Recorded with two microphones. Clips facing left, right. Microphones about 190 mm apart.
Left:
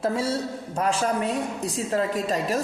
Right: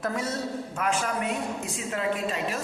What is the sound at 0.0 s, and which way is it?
A woman's voice, 30° left (ahead or behind).